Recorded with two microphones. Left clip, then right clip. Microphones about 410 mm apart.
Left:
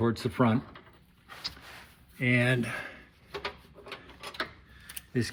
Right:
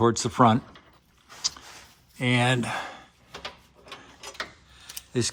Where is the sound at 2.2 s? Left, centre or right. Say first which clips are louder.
Right 3 dB; centre.